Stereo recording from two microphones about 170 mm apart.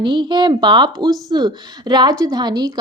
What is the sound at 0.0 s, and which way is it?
A woman's voice, 25° right (ahead or behind).